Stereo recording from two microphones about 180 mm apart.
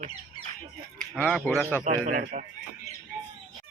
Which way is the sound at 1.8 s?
50° right (ahead or behind).